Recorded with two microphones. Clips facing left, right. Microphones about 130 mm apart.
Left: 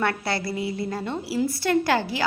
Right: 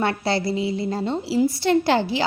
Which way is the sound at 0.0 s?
25° right (ahead or behind).